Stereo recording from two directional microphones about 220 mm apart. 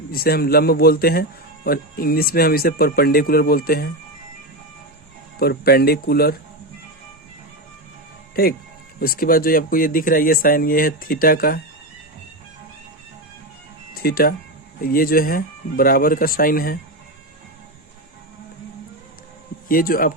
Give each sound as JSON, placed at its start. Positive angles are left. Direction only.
{"t": 0.1, "sound": "speech", "side_deg": 45}
{"t": 5.4, "sound": "speech", "side_deg": 45}
{"t": 8.4, "sound": "speech", "side_deg": 45}
{"t": 13.9, "sound": "speech", "side_deg": 45}
{"t": 19.6, "sound": "speech", "side_deg": 40}